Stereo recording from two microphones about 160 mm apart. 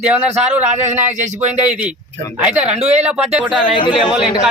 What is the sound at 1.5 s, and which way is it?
Speech, 10° right (ahead or behind).